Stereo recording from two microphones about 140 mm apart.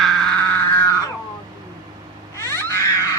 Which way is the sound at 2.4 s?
20° left (ahead or behind).